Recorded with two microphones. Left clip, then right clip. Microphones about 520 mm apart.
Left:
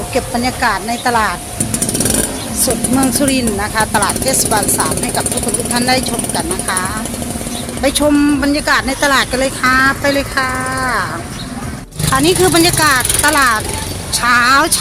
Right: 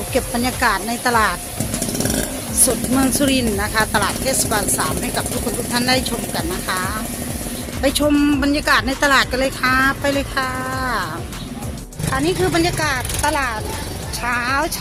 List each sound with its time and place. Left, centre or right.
0.1 s speech: right
3.1 s speech: right
12.1 s speech: right